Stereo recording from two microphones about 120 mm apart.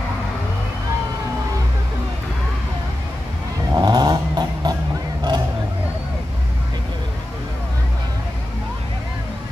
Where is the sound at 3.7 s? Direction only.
35° right (ahead or behind).